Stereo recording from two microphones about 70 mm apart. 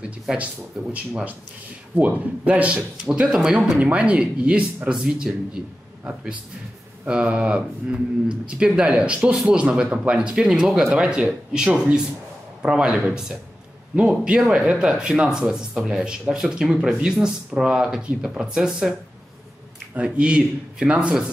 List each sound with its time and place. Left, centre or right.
0.0 s speech: centre
2.0 s speech: right
7.1 s speech: centre